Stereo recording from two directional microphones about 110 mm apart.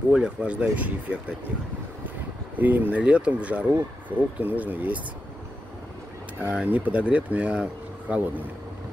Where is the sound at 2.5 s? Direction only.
15° right (ahead or behind).